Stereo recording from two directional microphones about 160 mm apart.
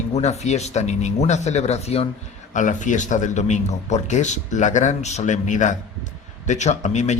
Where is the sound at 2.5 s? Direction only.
50° left (ahead or behind).